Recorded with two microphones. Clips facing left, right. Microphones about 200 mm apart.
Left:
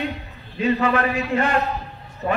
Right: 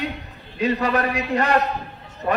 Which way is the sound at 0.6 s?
35° right (ahead or behind).